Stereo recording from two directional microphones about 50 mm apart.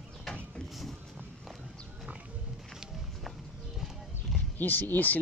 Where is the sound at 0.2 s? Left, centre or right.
Centre.